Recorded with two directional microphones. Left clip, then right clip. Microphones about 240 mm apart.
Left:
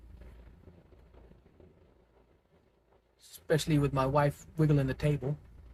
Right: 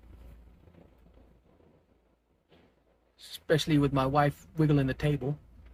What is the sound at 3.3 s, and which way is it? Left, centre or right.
Speech, right.